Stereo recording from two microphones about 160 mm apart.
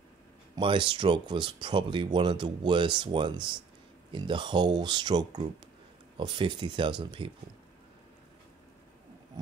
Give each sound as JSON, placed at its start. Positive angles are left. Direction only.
{"t": 0.6, "sound": "speech", "side_deg": -30}